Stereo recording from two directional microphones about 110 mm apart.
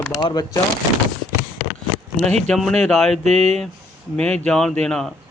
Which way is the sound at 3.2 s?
90° right.